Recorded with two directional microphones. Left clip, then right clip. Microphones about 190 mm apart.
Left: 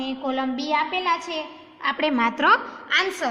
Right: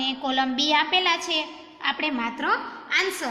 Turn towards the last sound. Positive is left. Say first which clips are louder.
# left 2 dB
turn(degrees=25)  # may be behind; listen again after turning